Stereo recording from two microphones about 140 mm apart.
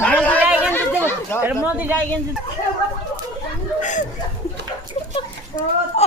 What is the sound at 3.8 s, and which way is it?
Speech, 65° left (ahead or behind).